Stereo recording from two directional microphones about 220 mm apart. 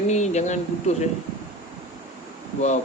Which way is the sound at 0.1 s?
30° left (ahead or behind).